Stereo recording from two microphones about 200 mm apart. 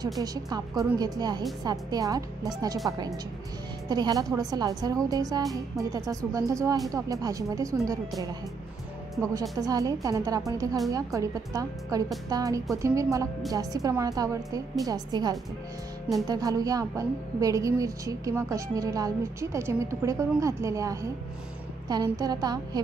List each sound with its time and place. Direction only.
0.2 s speech: 20° right (ahead or behind)
3.9 s a woman's voice: 20° right (ahead or behind)
9.3 s a woman's voice: 20° right (ahead or behind)